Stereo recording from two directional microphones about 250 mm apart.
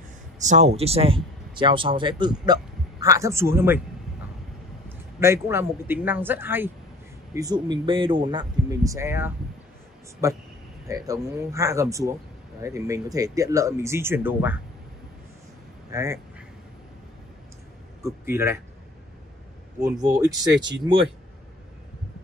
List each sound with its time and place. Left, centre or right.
0.4 s speech: right; by 3.8 s centre
4.8 s speech: centre
15.9 s quack: centre
18.0 s speech: centre
19.8 s speech: centre